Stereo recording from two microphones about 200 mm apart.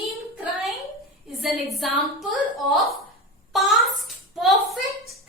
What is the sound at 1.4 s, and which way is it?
Speech, centre (ahead or behind).